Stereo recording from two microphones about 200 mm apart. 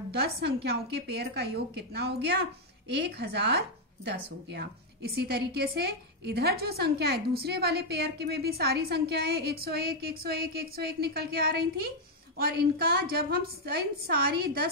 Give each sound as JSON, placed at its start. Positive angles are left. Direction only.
{"t": 0.1, "sound": "speech", "side_deg": -55}